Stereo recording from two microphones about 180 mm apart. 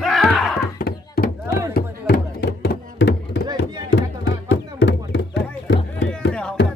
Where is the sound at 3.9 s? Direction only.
80° left.